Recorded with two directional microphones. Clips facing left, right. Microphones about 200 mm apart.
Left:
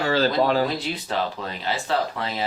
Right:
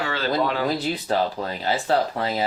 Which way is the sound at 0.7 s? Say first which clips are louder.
Right 3 dB; 35° right (ahead or behind).